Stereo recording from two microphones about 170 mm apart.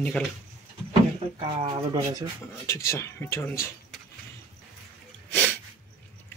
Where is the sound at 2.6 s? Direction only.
15° left (ahead or behind).